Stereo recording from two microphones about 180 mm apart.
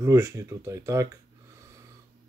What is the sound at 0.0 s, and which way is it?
Speech, 15° right (ahead or behind).